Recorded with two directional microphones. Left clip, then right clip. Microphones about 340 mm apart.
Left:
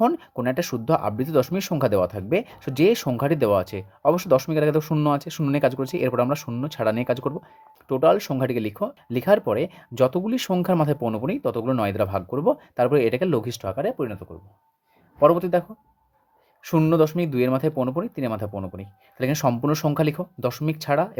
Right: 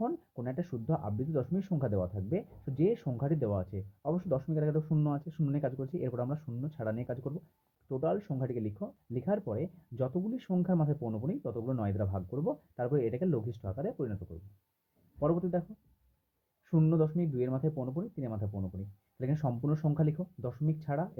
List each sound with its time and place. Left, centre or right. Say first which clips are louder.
0.0 s speech: left 15 dB; left
15.2 s speech: left 14 dB; left
16.6 s speech: left 12 dB; left